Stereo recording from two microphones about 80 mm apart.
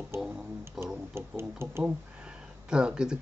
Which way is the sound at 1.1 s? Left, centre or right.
Right.